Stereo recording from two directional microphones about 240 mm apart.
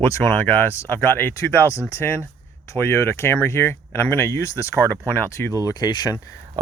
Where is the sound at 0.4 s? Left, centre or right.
Centre.